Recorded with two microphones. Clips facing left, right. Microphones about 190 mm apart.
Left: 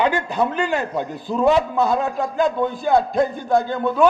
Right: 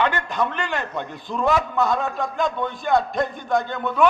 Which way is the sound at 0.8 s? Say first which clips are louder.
Left 5 dB; 10° left (ahead or behind).